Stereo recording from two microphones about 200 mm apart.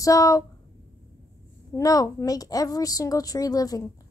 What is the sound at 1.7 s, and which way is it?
A child's voice, 15° left (ahead or behind).